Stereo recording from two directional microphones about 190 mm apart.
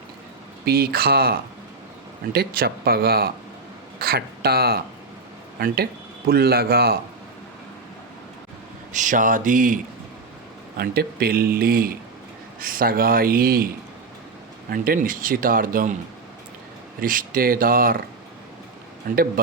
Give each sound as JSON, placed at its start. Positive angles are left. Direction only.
{"t": 0.6, "sound": "speech", "side_deg": -55}
{"t": 8.9, "sound": "speech", "side_deg": -40}
{"t": 10.8, "sound": "speech", "side_deg": -55}
{"t": 14.7, "sound": "speech", "side_deg": -45}
{"t": 17.0, "sound": "speech", "side_deg": -50}
{"t": 19.1, "sound": "speech", "side_deg": -45}